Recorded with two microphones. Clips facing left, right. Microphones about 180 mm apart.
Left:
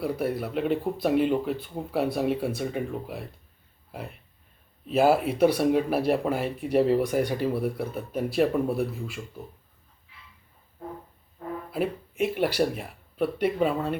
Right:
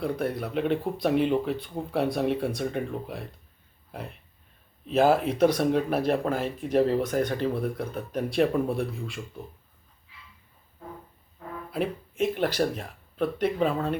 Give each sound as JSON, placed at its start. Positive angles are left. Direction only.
{"t": 0.0, "sound": "speech", "side_deg": 5}
{"t": 11.7, "sound": "speech", "side_deg": 5}